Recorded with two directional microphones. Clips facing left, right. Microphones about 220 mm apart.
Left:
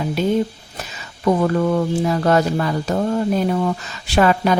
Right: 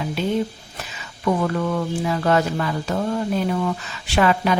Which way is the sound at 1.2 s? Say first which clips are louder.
Left 4 dB; 35° left (ahead or behind).